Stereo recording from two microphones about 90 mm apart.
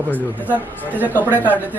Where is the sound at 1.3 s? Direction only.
20° left (ahead or behind).